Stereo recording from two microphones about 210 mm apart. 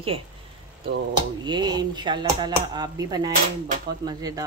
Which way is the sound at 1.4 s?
20° right (ahead or behind).